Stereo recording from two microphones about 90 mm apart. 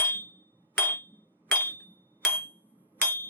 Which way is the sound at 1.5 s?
20° left (ahead or behind).